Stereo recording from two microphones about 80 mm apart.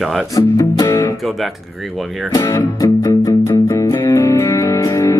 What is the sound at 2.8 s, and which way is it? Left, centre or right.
Music, left.